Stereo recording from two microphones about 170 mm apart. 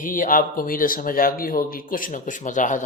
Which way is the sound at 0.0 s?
50° left (ahead or behind).